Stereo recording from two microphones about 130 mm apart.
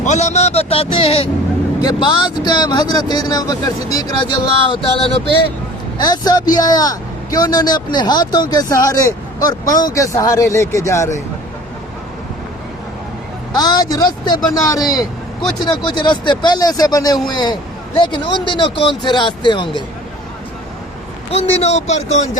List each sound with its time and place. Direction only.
0.0 s a man's voice: 65° left (ahead or behind); by 5.3 s 45° left (ahead or behind)
6.1 s speech: 30° left (ahead or behind)
13.5 s speech: 30° left (ahead or behind)
21.2 s speech: 55° left (ahead or behind)